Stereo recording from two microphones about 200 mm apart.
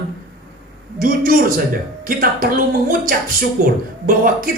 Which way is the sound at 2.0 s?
45° right (ahead or behind).